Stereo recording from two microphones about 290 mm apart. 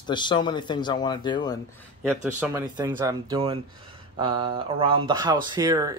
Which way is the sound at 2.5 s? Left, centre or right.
Centre.